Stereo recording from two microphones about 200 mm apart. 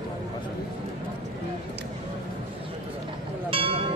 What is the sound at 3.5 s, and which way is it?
Music, 25° right (ahead or behind).